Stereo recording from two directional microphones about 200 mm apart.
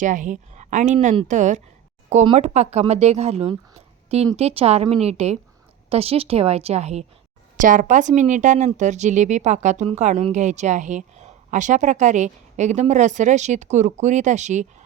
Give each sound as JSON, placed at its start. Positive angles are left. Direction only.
{"t": 0.0, "sound": "speech", "side_deg": -40}